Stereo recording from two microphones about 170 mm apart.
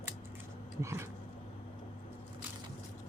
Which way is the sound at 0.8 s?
15° right (ahead or behind).